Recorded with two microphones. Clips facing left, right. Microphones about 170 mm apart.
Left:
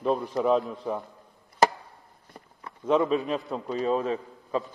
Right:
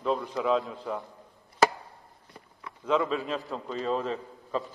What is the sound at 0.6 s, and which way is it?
Speech, centre (ahead or behind).